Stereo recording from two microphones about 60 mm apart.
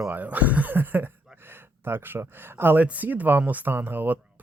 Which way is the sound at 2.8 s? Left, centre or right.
Right.